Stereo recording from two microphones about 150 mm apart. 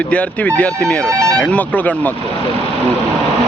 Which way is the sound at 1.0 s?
20° right (ahead or behind).